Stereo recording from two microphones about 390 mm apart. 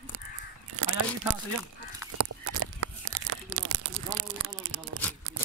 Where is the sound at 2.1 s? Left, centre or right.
Right.